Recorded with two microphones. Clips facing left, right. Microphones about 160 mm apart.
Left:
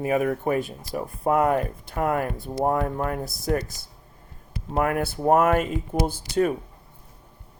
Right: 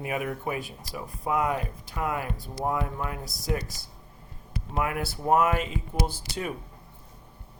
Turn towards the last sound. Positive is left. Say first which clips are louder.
# left 9 dB
turn(degrees=45)  # may be behind; listen again after turning